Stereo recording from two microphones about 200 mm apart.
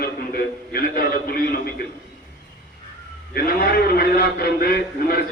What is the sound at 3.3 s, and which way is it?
A man's voice, 50° left (ahead or behind).